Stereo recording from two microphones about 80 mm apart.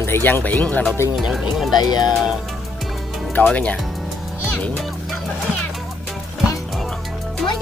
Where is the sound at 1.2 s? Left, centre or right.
Centre.